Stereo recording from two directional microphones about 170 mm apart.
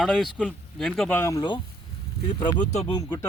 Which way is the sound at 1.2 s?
20° left (ahead or behind).